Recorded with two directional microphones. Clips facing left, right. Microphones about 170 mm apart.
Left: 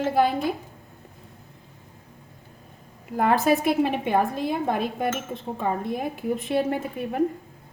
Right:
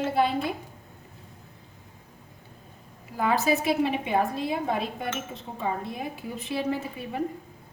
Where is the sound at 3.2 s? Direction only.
50° left (ahead or behind).